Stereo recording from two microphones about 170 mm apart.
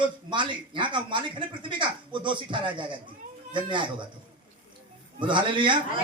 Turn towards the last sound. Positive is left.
turn(degrees=-30)  # may be behind; listen again after turning